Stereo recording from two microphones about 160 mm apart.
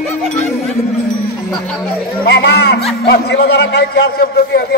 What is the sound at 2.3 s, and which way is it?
A man's voice, 90° left.